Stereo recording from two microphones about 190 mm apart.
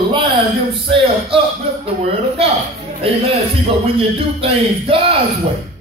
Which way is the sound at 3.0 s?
30° right (ahead or behind).